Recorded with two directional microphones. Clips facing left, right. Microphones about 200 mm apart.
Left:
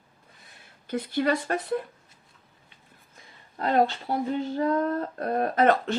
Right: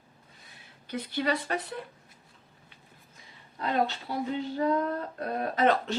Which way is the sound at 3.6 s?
50° left (ahead or behind).